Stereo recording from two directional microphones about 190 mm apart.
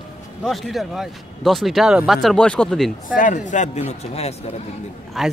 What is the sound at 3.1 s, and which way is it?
A man's voice, 40° left (ahead or behind).